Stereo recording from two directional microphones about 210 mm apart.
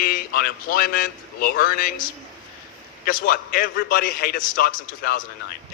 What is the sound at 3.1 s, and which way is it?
A man's voice, 40° left (ahead or behind).